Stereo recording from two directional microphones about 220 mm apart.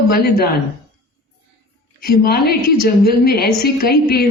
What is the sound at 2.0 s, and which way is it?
A woman's voice, 45° left (ahead or behind).